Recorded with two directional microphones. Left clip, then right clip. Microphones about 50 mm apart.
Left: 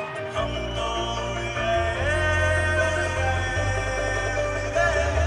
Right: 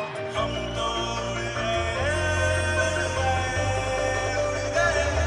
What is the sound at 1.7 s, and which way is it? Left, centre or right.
Music, right.